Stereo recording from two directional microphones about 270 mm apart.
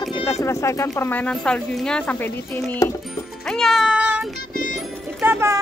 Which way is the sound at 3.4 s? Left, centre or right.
Centre.